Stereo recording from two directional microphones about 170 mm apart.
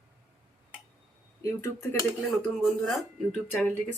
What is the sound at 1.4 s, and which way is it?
Speech, 15° left (ahead or behind).